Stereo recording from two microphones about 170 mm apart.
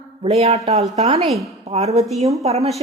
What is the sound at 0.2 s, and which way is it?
Speech, 35° right (ahead or behind).